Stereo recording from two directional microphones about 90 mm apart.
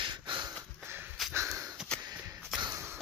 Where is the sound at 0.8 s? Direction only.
25° right (ahead or behind).